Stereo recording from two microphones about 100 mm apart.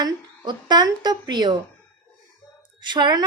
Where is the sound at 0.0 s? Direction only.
45° right (ahead or behind).